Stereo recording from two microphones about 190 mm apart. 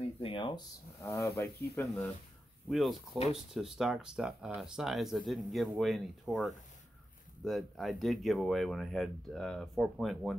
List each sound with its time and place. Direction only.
0.2 s speech: 25° left (ahead or behind)
1.0 s speech: 15° left (ahead or behind)
2.7 s speech: centre (ahead or behind)